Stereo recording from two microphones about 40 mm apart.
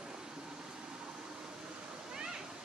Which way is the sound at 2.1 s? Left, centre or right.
Centre.